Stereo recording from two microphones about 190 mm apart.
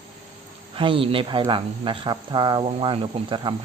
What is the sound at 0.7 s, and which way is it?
Speech, 25° right (ahead or behind).